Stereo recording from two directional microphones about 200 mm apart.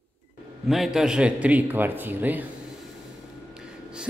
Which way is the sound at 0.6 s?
Centre (ahead or behind).